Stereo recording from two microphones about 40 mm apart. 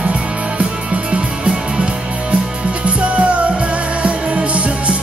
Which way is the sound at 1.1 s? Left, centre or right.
Right.